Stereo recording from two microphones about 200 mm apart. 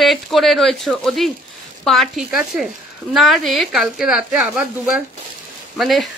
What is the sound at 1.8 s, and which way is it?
A woman's voice, centre (ahead or behind).